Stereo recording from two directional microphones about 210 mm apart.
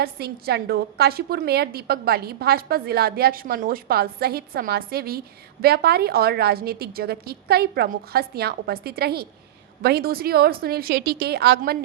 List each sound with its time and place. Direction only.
0.0 s a woman's voice: 50° right (ahead or behind)